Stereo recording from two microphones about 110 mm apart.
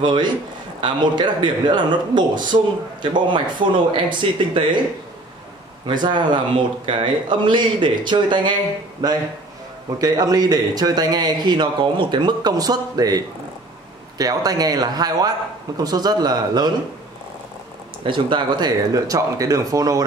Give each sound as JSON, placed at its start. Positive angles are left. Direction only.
{"t": 0.0, "sound": "speech", "side_deg": -45}
{"t": 5.9, "sound": "speech", "side_deg": -45}
{"t": 9.9, "sound": "speech", "side_deg": -35}
{"t": 18.0, "sound": "speech", "side_deg": -50}